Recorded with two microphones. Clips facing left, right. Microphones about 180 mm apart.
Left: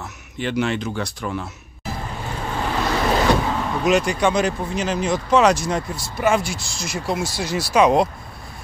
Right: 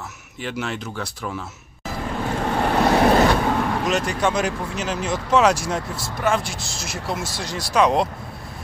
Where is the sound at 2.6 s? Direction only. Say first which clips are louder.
Right 5 dB; 60° right (ahead or behind).